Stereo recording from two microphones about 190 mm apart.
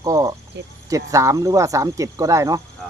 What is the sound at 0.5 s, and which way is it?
Speech, 65° right (ahead or behind).